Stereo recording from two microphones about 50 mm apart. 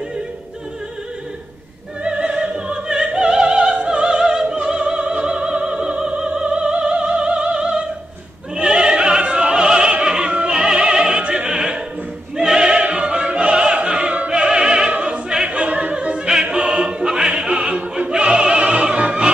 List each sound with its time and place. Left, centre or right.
2.0 s opera: centre